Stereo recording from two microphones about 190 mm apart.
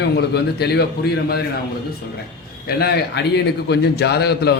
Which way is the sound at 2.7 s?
55° left (ahead or behind).